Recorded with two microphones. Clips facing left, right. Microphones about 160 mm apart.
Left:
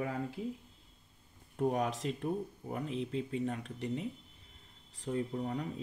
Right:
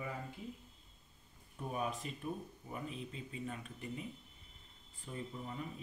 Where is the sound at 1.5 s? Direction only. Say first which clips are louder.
Left 8 dB; 90° left.